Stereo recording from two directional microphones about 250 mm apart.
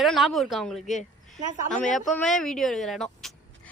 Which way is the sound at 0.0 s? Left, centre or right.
Centre.